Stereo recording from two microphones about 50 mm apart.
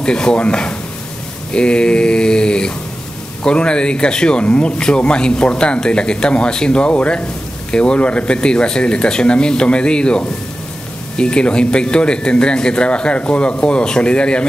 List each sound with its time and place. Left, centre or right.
0.0 s mantra: centre
3.4 s speech: centre